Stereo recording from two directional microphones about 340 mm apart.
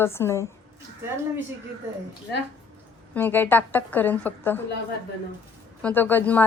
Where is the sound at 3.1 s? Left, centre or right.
Centre.